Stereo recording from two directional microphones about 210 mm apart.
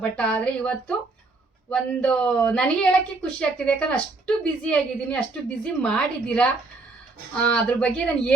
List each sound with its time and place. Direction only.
0.0 s speech: 5° left (ahead or behind)